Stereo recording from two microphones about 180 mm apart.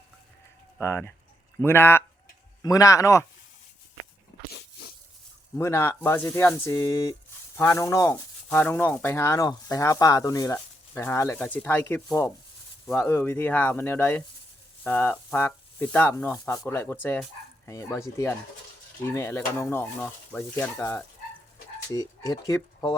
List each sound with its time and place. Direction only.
0.8 s speech: 15° left (ahead or behind)
5.5 s speech: 15° left (ahead or behind)